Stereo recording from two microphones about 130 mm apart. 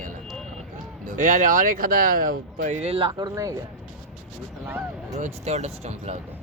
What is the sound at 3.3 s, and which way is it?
Speech, 25° right (ahead or behind).